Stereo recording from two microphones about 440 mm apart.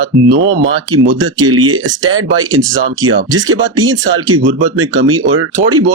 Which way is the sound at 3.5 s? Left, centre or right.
Right.